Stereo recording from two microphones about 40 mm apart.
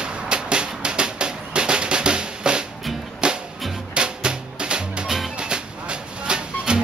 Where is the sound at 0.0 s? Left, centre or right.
Right.